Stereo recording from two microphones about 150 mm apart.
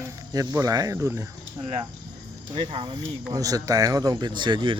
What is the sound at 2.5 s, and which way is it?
Speech, 35° right (ahead or behind).